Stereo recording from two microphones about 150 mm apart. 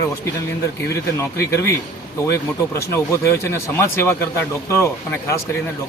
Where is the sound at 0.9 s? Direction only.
20° left (ahead or behind).